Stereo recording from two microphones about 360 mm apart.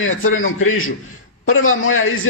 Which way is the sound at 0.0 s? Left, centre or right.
Left.